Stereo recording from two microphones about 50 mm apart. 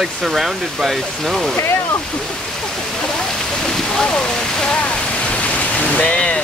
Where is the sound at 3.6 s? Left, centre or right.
Centre.